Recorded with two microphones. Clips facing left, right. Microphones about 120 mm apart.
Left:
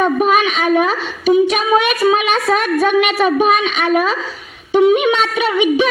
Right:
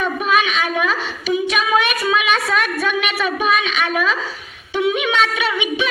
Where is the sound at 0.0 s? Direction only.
45° left (ahead or behind).